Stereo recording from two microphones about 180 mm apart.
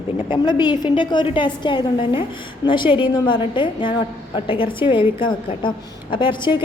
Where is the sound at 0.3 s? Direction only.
25° left (ahead or behind).